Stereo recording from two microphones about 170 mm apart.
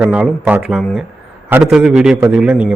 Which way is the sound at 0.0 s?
5° right (ahead or behind).